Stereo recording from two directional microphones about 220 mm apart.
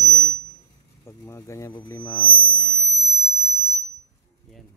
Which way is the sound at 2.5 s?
15° left (ahead or behind).